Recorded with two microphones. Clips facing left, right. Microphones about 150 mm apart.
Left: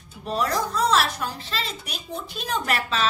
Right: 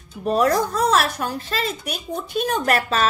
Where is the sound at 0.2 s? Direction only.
50° right (ahead or behind).